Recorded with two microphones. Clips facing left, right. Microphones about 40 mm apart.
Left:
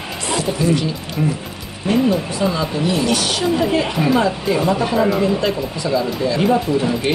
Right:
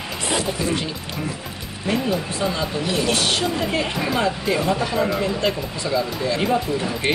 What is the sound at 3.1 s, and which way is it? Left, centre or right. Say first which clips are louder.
Speech: left 1 dB; right.